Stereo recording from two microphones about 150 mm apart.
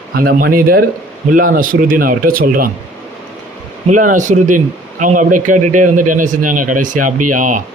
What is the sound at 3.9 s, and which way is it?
A man's voice, 60° right (ahead or behind).